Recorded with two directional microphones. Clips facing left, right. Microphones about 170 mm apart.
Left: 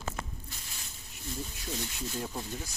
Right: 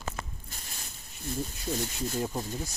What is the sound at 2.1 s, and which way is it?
Speech, 40° right (ahead or behind).